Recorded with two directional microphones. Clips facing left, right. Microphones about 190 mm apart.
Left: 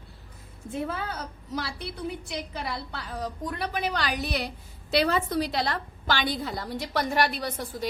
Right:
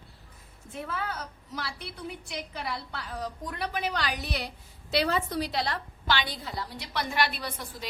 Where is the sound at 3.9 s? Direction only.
40° left (ahead or behind).